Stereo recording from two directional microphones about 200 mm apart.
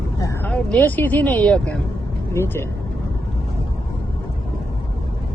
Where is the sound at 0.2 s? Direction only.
15° left (ahead or behind).